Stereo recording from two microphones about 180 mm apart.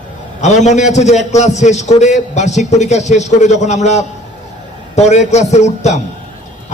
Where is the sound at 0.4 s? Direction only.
40° left (ahead or behind).